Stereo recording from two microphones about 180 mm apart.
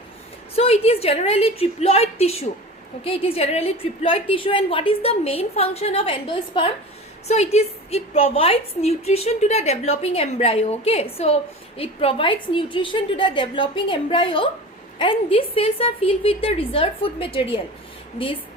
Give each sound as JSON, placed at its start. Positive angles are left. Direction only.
{"t": 0.5, "sound": "a woman's voice", "side_deg": 35}